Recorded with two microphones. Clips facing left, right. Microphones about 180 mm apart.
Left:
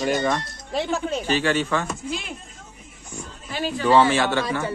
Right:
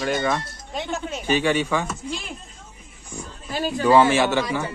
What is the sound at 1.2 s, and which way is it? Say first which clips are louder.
Speech: right 5 dB; 15° right (ahead or behind).